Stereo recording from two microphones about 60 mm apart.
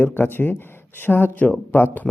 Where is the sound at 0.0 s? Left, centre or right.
Left.